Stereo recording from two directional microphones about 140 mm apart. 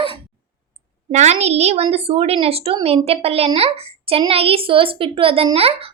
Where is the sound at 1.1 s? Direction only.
55° right (ahead or behind).